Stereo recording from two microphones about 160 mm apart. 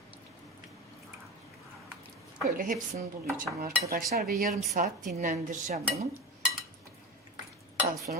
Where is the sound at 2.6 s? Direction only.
55° right (ahead or behind).